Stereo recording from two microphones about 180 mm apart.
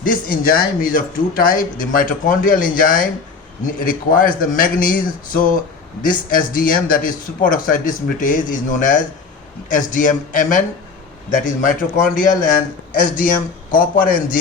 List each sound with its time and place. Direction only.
0.0 s speech: 50° left (ahead or behind)